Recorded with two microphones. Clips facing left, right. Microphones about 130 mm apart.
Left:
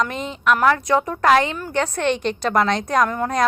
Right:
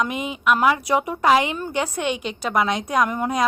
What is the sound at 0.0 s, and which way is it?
A woman's voice, 10° right (ahead or behind).